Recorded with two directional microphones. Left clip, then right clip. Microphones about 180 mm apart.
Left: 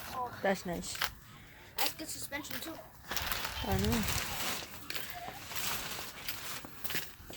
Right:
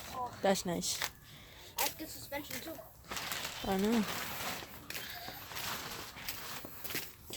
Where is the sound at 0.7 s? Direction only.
30° right (ahead or behind).